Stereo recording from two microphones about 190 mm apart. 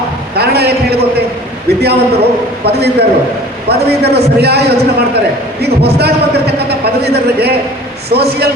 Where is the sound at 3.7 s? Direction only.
60° right (ahead or behind).